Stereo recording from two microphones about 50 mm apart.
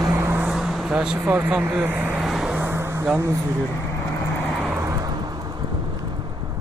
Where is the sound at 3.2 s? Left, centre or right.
Right.